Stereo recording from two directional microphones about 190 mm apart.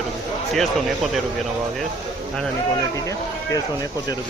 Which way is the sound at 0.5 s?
Centre (ahead or behind).